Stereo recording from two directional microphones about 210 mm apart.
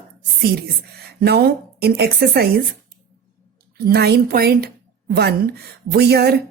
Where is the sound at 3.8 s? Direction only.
50° right (ahead or behind).